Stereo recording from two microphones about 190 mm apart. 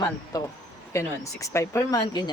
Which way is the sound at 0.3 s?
20° left (ahead or behind).